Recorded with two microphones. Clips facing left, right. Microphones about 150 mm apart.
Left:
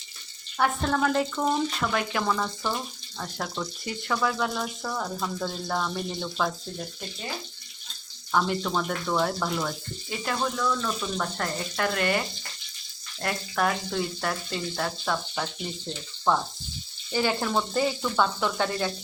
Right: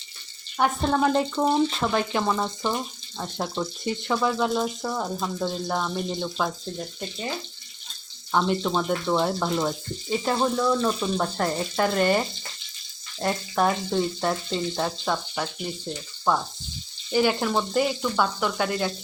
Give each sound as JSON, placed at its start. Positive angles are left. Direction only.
{"t": 0.6, "sound": "speech", "side_deg": -20}
{"t": 8.3, "sound": "speech", "side_deg": -20}
{"t": 13.2, "sound": "speech", "side_deg": -25}
{"t": 16.3, "sound": "frying", "side_deg": -10}